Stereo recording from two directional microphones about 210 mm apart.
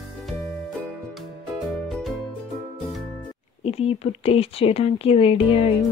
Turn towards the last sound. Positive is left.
turn(degrees=25)  # may be behind; listen again after turning